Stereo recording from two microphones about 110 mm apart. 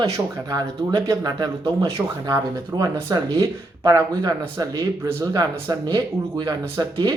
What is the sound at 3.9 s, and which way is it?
Speech, 35° right (ahead or behind).